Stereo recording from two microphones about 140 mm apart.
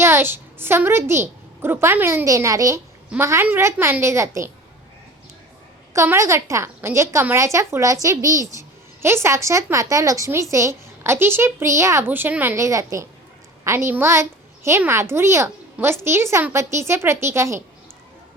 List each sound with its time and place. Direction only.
0.0 s a woman's voice: 15° right (ahead or behind)
5.9 s a woman's voice: 20° right (ahead or behind)